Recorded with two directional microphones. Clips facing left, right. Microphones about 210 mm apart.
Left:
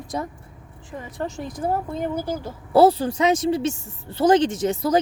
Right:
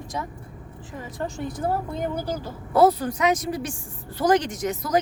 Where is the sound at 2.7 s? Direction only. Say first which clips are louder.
Left 3 dB; 30° left (ahead or behind).